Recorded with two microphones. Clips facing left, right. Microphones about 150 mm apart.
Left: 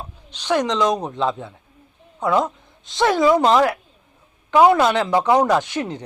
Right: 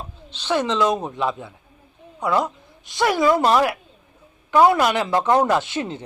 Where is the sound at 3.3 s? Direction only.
20° left (ahead or behind).